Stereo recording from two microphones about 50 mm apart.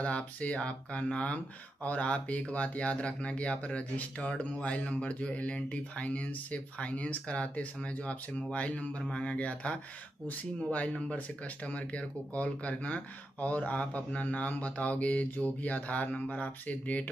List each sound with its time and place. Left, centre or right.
0.0 s speech: left